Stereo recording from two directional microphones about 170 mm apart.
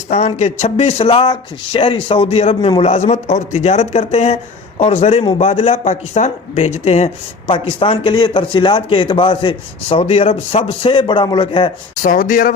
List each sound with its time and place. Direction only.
0.1 s speech: 40° left (ahead or behind)
12.0 s speech: 50° left (ahead or behind)